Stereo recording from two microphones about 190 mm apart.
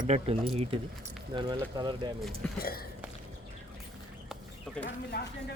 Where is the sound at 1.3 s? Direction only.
25° right (ahead or behind).